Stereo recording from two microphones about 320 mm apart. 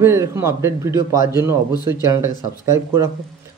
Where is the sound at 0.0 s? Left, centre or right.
Centre.